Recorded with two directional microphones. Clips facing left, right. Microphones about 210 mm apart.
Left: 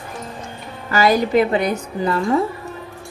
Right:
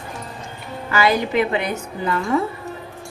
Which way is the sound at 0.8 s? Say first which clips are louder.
Left 3 dB; 40° left (ahead or behind).